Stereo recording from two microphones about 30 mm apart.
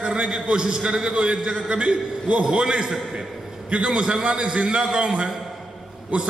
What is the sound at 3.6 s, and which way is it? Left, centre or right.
A man's voice, right.